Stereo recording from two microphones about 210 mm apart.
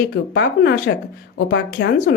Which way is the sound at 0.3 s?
55° left (ahead or behind).